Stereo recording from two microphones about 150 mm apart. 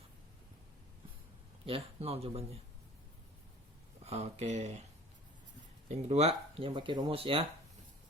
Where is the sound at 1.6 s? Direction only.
40° right (ahead or behind).